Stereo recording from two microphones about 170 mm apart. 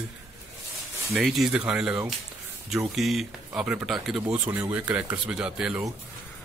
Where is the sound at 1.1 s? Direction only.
Centre (ahead or behind).